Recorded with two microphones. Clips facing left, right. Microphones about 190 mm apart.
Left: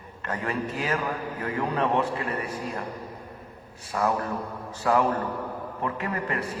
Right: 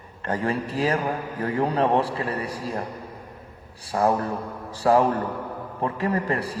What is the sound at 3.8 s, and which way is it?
A man's voice, 35° right (ahead or behind).